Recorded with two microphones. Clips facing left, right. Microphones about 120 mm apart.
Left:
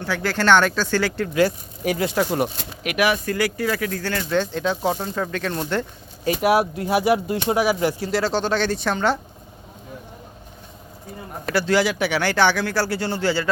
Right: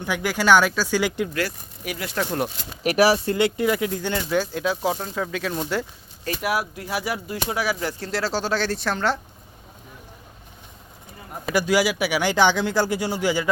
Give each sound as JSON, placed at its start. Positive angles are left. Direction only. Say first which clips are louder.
{"t": 0.0, "sound": "speech", "louder": "left 1 dB", "side_deg": -15}
{"t": 1.4, "sound": "speech", "louder": "left 8 dB", "side_deg": 30}
{"t": 2.1, "sound": "speech", "louder": "right 1 dB", "side_deg": 5}
{"t": 2.8, "sound": "speech", "louder": "right 3 dB", "side_deg": -35}
{"t": 3.3, "sound": "speech", "louder": "right 2 dB", "side_deg": -20}
{"t": 6.4, "sound": "speech", "louder": "left 7 dB", "side_deg": 25}
{"t": 7.9, "sound": "speech", "louder": "left 4 dB", "side_deg": 0}
{"t": 11.5, "sound": "speech", "louder": "left 1 dB", "side_deg": -10}